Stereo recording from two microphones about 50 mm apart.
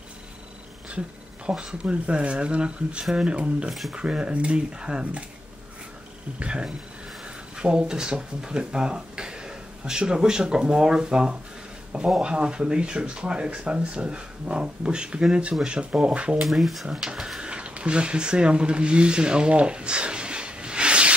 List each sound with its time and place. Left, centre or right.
0.8 s speech: right
6.4 s speech: right
16.4 s speech: centre; by 21.1 s right